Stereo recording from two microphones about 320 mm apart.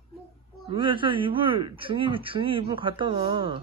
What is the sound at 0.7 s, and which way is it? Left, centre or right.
Speech, centre.